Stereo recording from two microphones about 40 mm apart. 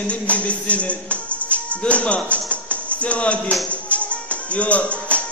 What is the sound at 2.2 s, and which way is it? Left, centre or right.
Music, left.